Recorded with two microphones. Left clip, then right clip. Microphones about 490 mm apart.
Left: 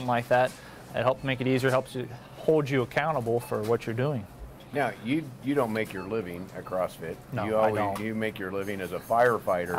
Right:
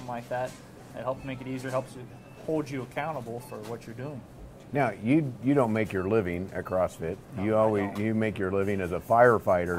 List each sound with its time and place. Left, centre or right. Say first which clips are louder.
0.1 s speech: left 9 dB; left
4.7 s speech: right 3 dB; right